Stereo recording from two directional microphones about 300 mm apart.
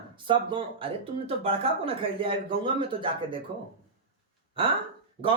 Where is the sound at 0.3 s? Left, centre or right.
Centre.